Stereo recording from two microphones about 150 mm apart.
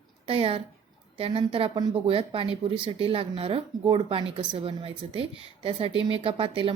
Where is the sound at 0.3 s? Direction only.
40° right (ahead or behind).